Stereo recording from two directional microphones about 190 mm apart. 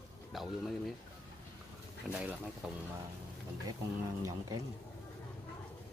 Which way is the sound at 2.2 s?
5° right (ahead or behind).